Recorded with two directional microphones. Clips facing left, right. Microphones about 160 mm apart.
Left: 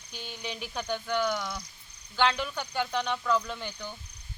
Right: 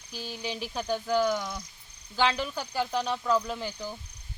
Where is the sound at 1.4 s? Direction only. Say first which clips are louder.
Even; 20° right (ahead or behind).